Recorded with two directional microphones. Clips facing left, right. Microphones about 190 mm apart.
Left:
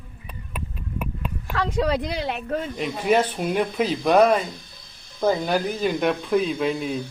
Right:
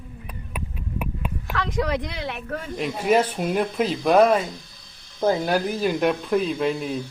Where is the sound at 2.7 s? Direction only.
Centre (ahead or behind).